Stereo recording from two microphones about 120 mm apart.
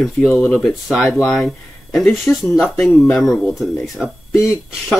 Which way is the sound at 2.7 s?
15° left (ahead or behind).